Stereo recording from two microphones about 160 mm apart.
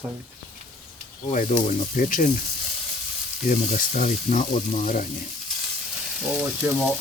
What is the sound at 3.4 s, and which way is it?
Speech, 60° left (ahead or behind).